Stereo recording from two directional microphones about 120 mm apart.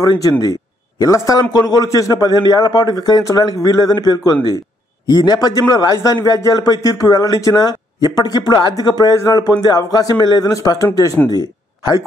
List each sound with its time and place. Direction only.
0.0 s a man's voice: 30° left (ahead or behind)